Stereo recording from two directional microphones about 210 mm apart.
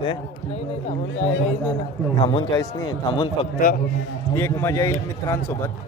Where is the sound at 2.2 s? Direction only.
20° left (ahead or behind).